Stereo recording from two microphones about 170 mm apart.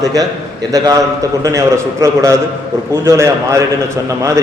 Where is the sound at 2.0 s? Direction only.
20° right (ahead or behind).